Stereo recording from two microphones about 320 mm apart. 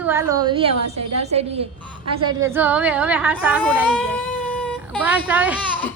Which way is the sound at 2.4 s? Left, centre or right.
Centre.